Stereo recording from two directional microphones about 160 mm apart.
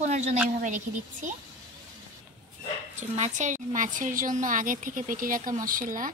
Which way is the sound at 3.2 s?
50° right (ahead or behind).